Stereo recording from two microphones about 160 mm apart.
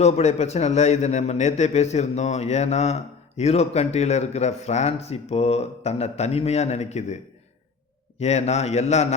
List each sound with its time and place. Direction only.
0.0 s a man's voice: 45° left (ahead or behind)
8.2 s a man's voice: 40° left (ahead or behind)